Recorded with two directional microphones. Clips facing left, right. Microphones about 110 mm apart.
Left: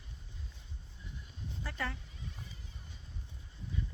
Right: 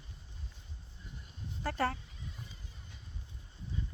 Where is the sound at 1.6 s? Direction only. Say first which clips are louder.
Right 7 dB; 45° right (ahead or behind).